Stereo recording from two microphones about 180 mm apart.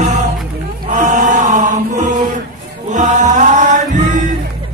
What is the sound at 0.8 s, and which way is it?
Chant, 45° right (ahead or behind).